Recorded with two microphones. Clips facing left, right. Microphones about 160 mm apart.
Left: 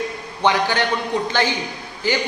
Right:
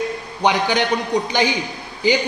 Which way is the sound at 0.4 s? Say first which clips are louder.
Right 1 dB; 15° right (ahead or behind).